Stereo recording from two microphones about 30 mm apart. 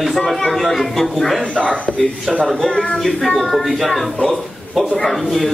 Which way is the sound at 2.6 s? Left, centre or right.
Left.